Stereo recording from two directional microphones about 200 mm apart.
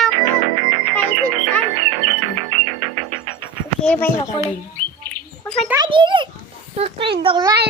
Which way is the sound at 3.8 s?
10° left (ahead or behind).